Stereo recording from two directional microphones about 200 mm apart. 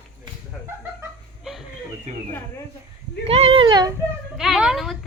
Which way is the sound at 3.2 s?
30° right (ahead or behind).